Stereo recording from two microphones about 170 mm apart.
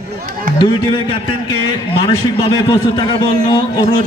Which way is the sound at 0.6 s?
30° left (ahead or behind).